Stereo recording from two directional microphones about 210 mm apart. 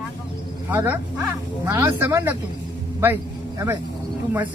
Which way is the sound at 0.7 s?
10° right (ahead or behind).